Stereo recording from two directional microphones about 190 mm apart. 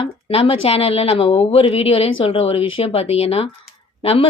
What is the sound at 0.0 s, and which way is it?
Speech, 30° left (ahead or behind).